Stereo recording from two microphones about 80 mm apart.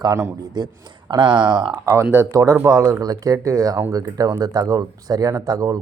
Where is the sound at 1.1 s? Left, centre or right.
Right.